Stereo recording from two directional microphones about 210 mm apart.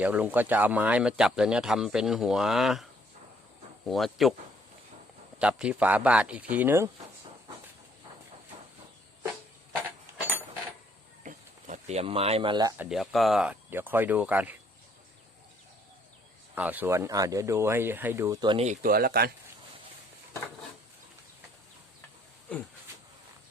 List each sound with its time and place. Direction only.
0.0 s speech: 5° right (ahead or behind)
3.8 s speech: centre (ahead or behind)
5.4 s speech: 5° right (ahead or behind)
11.2 s a sound: 35° right (ahead or behind)
12.7 s speech: 5° right (ahead or behind)
16.6 s speech: 10° right (ahead or behind); by 19.3 s 45° right (ahead or behind)